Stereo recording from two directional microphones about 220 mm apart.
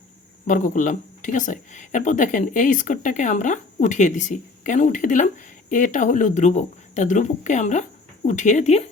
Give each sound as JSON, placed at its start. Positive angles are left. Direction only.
{"t": 0.4, "sound": "speech", "side_deg": 35}